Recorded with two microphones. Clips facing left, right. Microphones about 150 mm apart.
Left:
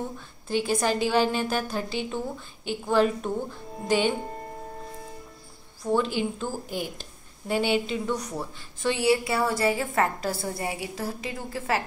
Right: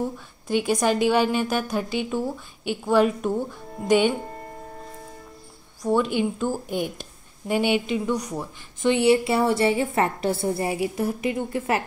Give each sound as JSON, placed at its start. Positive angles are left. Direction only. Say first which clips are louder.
{"t": 0.5, "sound": "a woman's voice", "louder": "right 3 dB", "side_deg": -15}
{"t": 5.8, "sound": "a woman's voice", "louder": "right 3 dB", "side_deg": -15}